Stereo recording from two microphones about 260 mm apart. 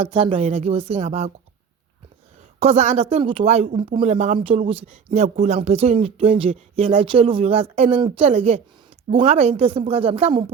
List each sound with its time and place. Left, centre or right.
0.0 s speech: right
2.6 s speech: right